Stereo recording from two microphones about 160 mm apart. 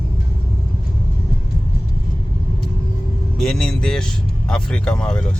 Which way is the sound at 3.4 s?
5° left (ahead or behind).